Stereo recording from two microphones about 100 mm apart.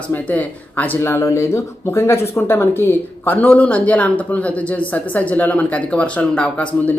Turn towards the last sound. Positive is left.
turn(degrees=10)  # may be behind; listen again after turning